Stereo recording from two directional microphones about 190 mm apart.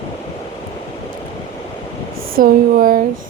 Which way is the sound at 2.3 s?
50° right (ahead or behind).